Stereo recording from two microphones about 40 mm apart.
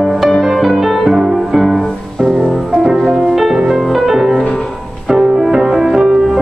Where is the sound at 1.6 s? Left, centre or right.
Centre.